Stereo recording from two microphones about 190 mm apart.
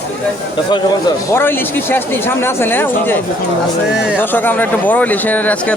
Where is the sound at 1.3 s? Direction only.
10° left (ahead or behind).